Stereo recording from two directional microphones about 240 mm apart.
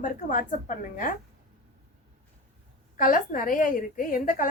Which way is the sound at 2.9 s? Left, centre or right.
Left.